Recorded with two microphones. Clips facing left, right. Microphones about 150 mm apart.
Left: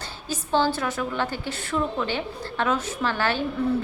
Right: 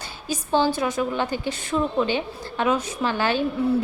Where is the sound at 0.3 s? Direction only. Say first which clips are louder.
Right 2 dB; 15° right (ahead or behind).